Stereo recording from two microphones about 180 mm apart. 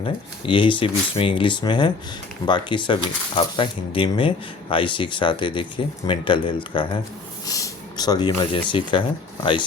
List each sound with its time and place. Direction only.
0.0 s speech: 30° left (ahead or behind)